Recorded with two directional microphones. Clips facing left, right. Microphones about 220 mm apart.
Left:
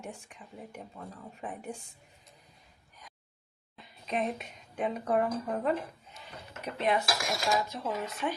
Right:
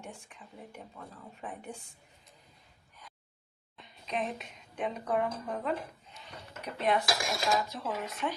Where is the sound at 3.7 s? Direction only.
Centre (ahead or behind).